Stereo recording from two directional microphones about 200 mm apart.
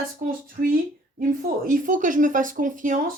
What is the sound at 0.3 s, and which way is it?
Speech, 45° right (ahead or behind).